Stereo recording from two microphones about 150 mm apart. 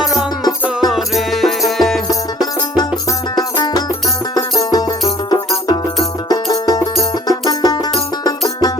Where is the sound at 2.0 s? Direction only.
25° left (ahead or behind).